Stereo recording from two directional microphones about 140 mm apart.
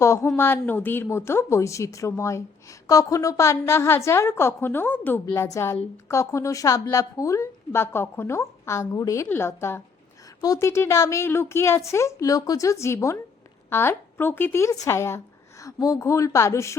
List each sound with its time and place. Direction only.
0.0 s a woman's voice: 20° left (ahead or behind)